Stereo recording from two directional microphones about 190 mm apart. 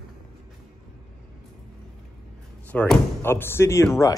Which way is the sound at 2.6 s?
10° left (ahead or behind).